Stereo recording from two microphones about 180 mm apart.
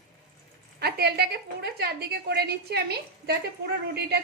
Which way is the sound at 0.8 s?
60° right (ahead or behind).